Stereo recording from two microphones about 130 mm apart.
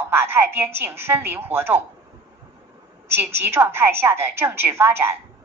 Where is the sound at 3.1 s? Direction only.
15° right (ahead or behind).